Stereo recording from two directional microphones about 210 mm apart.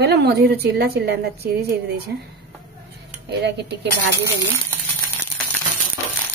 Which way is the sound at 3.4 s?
50° right (ahead or behind).